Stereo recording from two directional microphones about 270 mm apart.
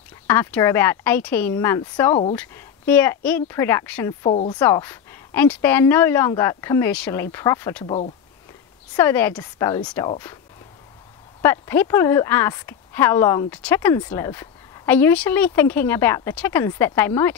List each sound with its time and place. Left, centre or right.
0.3 s a woman's voice: centre
4.3 s speech: left
4.6 s a woman's voice: centre
8.9 s a woman's voice: centre
11.4 s a woman's voice: centre